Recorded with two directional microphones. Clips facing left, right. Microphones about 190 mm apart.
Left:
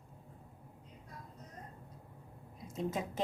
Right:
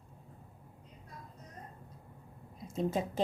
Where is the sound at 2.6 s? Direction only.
30° right (ahead or behind).